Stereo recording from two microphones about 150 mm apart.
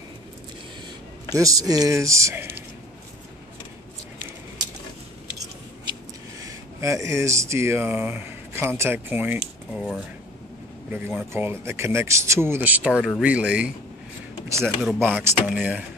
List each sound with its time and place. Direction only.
1.3 s speech: 25° right (ahead or behind)
6.4 s speech: 20° right (ahead or behind)
9.8 s speech: centre (ahead or behind)
10.9 s speech: 15° right (ahead or behind)
14.8 s speech: 10° right (ahead or behind)